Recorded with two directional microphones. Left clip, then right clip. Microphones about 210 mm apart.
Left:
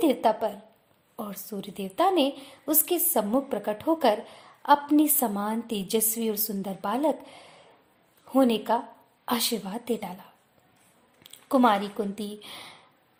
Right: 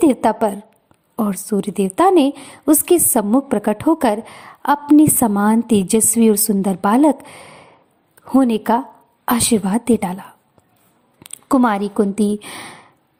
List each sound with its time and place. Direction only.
0.0 s a woman's voice: 35° right (ahead or behind)